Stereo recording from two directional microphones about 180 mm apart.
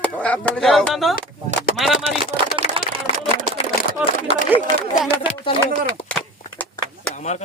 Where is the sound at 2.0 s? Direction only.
30° right (ahead or behind).